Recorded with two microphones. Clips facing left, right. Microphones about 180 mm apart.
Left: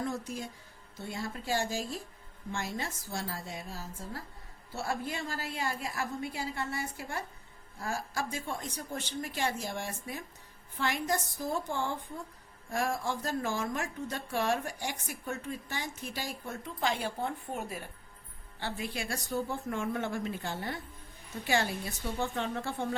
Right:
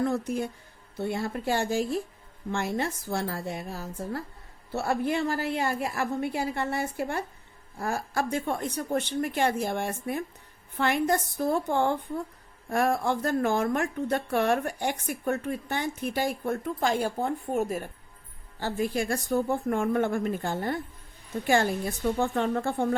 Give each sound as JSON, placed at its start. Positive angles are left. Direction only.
{"t": 0.0, "sound": "a woman's voice", "side_deg": -60}